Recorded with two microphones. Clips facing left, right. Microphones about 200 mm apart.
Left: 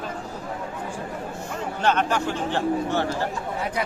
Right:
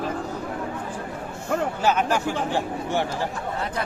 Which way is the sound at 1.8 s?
10° right (ahead or behind).